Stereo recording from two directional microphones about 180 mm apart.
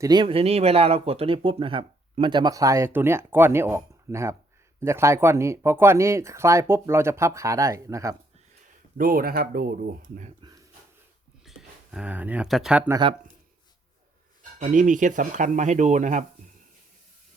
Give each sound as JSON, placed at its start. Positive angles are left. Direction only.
{"t": 0.0, "sound": "speech", "side_deg": -25}
{"t": 8.6, "sound": "speech", "side_deg": -50}
{"t": 11.4, "sound": "speech", "side_deg": -5}
{"t": 14.6, "sound": "speech", "side_deg": -45}